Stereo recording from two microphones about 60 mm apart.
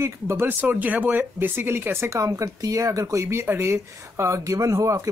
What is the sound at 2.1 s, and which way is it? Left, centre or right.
Speech, right.